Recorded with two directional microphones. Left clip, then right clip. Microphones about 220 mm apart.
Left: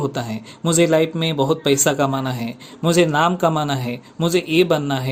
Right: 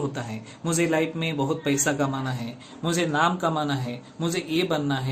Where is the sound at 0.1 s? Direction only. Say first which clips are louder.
Left 7 dB; 35° left (ahead or behind).